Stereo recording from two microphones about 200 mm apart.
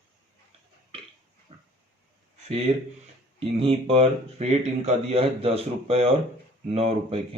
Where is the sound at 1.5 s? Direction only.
30° right (ahead or behind).